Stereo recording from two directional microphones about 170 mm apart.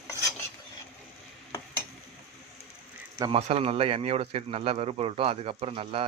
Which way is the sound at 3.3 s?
35° right (ahead or behind).